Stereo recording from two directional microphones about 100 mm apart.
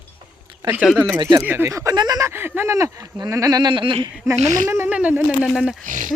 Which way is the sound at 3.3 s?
35° right (ahead or behind).